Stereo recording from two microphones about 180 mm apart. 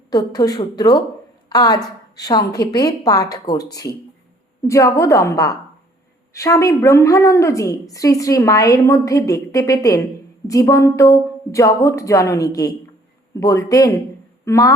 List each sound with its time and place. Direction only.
0.1 s a woman's voice: 20° left (ahead or behind)